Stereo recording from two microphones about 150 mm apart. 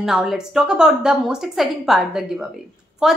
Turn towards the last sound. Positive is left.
turn(degrees=-5)  # may be behind; listen again after turning